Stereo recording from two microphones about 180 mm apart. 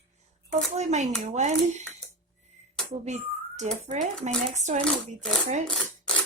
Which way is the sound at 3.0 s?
40° right (ahead or behind).